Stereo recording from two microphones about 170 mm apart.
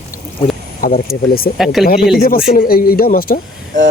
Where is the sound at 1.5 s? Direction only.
Centre (ahead or behind).